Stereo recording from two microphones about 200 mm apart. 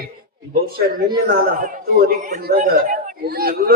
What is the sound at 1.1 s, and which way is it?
A man's voice, 45° right (ahead or behind).